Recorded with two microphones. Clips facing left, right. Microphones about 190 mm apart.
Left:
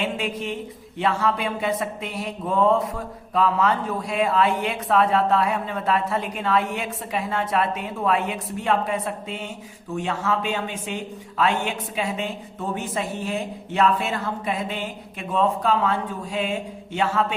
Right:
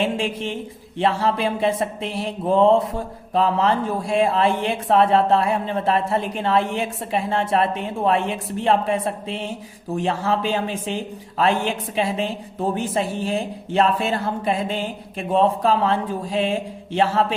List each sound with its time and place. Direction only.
0.0 s speech: 30° right (ahead or behind)